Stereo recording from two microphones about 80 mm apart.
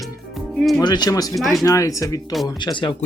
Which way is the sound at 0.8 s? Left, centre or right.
Left.